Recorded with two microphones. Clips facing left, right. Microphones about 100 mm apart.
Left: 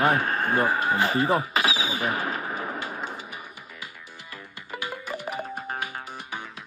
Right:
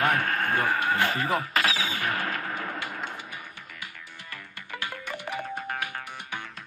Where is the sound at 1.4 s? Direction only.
15° left (ahead or behind).